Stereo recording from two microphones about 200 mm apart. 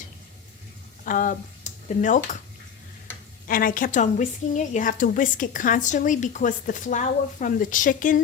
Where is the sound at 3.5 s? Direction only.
45° left (ahead or behind).